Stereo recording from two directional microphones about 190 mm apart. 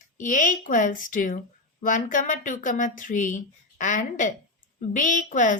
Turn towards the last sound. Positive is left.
turn(degrees=40)  # may be behind; listen again after turning